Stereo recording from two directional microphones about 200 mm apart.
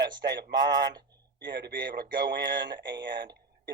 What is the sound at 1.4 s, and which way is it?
A man's voice, 60° right (ahead or behind).